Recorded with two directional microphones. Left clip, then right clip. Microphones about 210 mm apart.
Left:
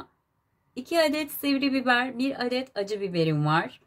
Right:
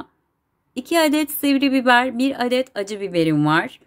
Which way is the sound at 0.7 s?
30° right (ahead or behind).